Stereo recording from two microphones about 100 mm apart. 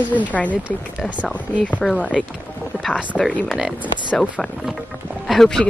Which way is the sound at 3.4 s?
Centre (ahead or behind).